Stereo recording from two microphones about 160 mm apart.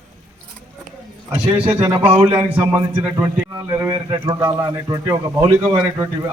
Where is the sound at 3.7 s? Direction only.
15° right (ahead or behind).